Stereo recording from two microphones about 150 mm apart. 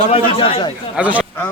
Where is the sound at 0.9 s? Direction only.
10° right (ahead or behind).